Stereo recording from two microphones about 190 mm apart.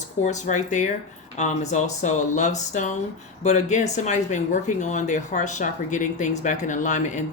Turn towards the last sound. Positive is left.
turn(degrees=40)  # may be behind; listen again after turning